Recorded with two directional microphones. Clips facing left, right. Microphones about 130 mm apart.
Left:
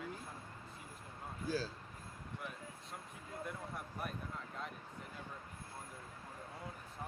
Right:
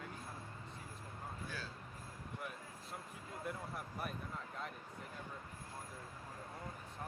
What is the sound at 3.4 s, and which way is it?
Speech, centre (ahead or behind).